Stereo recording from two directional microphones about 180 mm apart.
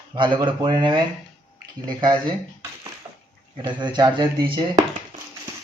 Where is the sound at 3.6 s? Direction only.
25° right (ahead or behind).